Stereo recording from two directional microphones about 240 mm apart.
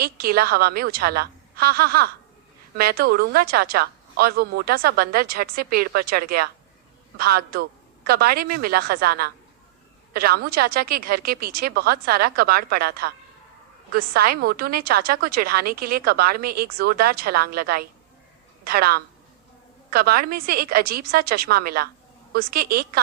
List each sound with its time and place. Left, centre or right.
0.0 s a woman's voice: right